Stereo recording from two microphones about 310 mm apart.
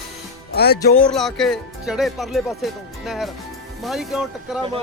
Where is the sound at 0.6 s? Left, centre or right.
Left.